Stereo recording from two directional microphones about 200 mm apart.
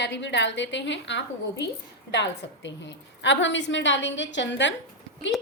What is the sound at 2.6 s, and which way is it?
A woman's voice, 65° left (ahead or behind).